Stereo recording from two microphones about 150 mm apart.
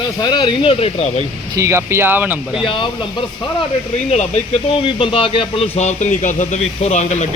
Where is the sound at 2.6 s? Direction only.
35° left (ahead or behind).